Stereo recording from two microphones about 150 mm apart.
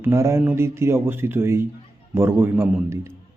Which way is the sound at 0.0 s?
20° right (ahead or behind).